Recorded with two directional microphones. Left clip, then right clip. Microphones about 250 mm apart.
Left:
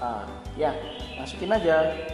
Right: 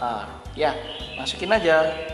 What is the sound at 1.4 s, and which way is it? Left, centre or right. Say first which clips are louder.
Speech: right 3 dB; centre.